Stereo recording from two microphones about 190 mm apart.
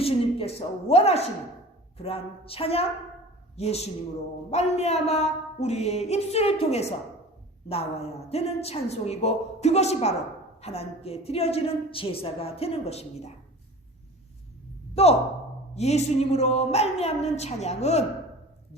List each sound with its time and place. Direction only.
0.0 s a woman's voice: 30° left (ahead or behind)
15.0 s a woman's voice: 30° left (ahead or behind)